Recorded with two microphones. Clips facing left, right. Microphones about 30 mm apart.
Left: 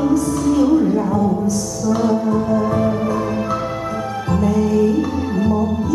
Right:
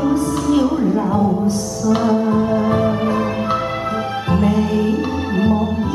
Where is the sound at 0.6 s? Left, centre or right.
Centre.